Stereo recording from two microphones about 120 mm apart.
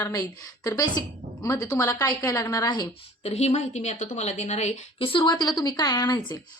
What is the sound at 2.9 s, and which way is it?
A woman's voice, 60° left (ahead or behind).